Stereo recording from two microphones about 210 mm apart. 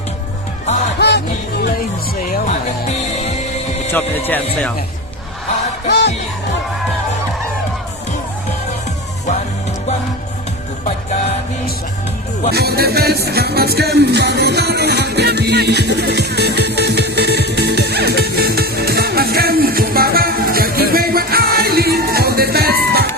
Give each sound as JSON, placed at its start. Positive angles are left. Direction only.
{"t": 0.9, "sound": "music", "side_deg": 50}
{"t": 2.2, "sound": "music", "side_deg": 35}
{"t": 10.8, "sound": "music", "side_deg": 30}
{"t": 12.5, "sound": "music", "side_deg": -50}